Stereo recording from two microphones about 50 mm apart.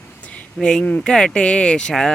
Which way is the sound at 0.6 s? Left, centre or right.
Centre.